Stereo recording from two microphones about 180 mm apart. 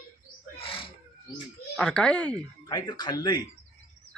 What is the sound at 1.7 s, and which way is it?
Speech, 5° left (ahead or behind).